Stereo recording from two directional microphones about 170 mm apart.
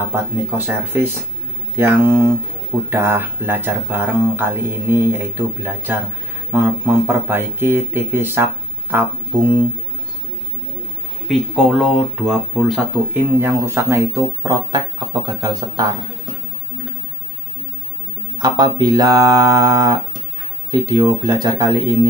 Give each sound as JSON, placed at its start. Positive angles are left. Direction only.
{"t": 0.1, "sound": "speech", "side_deg": -10}
{"t": 11.2, "sound": "speech", "side_deg": 0}
{"t": 18.4, "sound": "speech", "side_deg": -25}